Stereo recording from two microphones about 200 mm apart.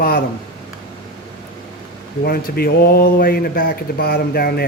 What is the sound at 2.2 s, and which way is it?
Speech, 50° left (ahead or behind).